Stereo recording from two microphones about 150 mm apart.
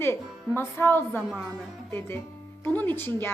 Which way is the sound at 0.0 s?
15° left (ahead or behind).